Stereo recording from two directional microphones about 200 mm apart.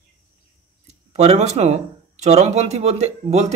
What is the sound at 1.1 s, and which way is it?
Speech, 30° right (ahead or behind).